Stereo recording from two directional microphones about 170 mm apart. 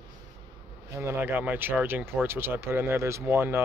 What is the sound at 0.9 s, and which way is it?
Speech, 15° right (ahead or behind).